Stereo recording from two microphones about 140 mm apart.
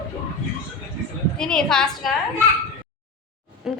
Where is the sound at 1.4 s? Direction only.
5° left (ahead or behind).